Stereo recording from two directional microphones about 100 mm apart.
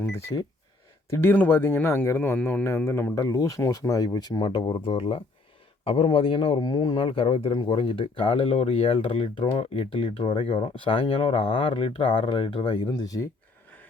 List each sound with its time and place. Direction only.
0.0 s speech: 25° left (ahead or behind)
3.2 s speech: 35° left (ahead or behind); by 6.6 s 65° left (ahead or behind)
6.6 s speech: 45° left (ahead or behind)
12.9 s speech: 35° left (ahead or behind)